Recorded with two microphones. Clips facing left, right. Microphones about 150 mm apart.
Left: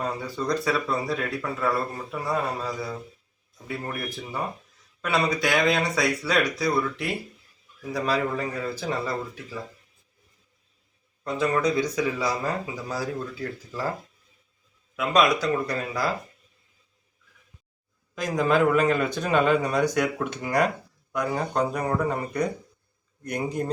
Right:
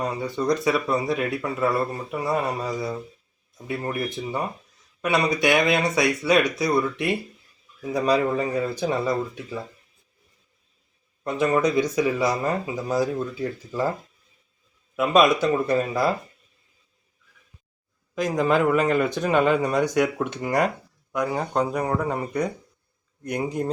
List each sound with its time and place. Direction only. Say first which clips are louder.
0.3 s speech: right 4 dB; 20° right (ahead or behind)
11.2 s speech: right 3 dB; 20° right (ahead or behind)
14.9 s speech: right 3 dB; 25° right (ahead or behind)
18.1 s speech: right 2 dB; 25° right (ahead or behind)
23.2 s speech: right 2 dB; 20° right (ahead or behind)